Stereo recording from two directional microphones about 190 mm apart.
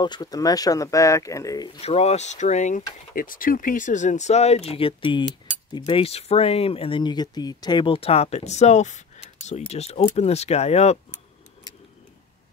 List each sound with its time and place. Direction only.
0.0 s speech: 20° left (ahead or behind)
1.8 s speech: 35° left (ahead or behind)